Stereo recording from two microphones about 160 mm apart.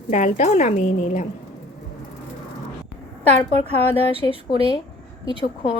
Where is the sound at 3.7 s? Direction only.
40° right (ahead or behind).